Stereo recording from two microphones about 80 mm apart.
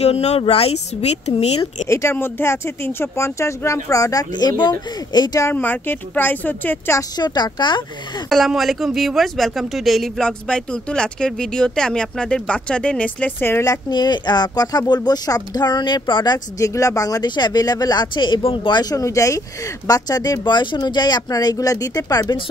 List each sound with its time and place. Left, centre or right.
1.9 s speech: left
4.3 s speech: left
5.5 s a woman's voice: left
7.2 s speech: left
8.3 s speech: centre; by 13.7 s left
13.7 s speech: left
16.5 s speech: left
17.4 s speech: left
18.9 s speech: left
20.5 s speech: left